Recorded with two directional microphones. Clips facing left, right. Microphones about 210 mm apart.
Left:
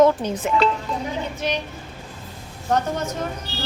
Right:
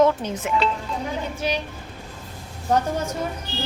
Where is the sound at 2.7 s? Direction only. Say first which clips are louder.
Even; 10° right (ahead or behind).